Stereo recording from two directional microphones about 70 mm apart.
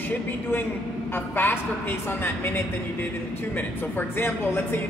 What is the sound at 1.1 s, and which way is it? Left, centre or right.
A woman's voice, left.